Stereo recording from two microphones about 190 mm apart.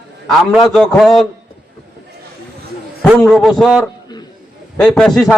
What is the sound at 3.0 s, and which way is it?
A man's voice, 5° left (ahead or behind).